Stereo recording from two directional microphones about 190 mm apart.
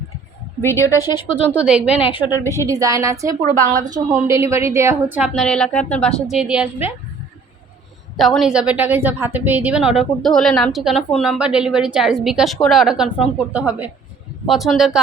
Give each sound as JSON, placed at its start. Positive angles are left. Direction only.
{"t": 0.6, "sound": "a woman's voice", "side_deg": 15}
{"t": 1.5, "sound": "a woman's voice", "side_deg": -5}
{"t": 2.0, "sound": "a woman's voice", "side_deg": 25}
{"t": 2.5, "sound": "a woman's voice", "side_deg": -15}
{"t": 8.1, "sound": "a woman's voice", "side_deg": 0}